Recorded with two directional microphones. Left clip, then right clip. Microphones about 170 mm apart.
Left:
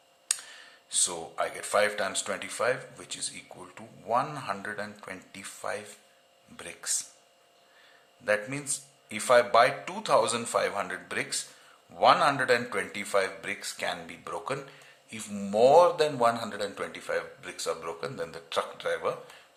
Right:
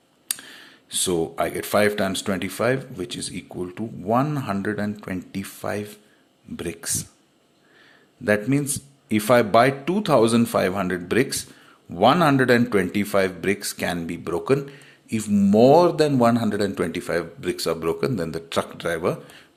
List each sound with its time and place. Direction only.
0.3 s speech: 35° right (ahead or behind)
8.2 s speech: 35° right (ahead or behind)